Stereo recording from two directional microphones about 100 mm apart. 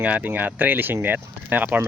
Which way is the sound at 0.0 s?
15° right (ahead or behind).